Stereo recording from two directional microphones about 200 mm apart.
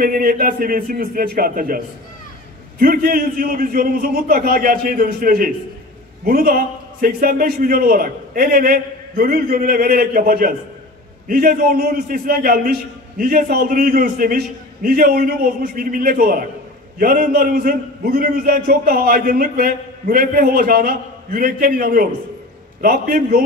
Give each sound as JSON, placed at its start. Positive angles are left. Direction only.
{"t": 0.0, "sound": "a man's voice", "side_deg": -45}
{"t": 2.8, "sound": "a man's voice", "side_deg": -45}